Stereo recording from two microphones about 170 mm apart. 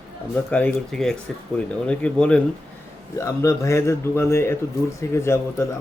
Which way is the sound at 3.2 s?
15° left (ahead or behind).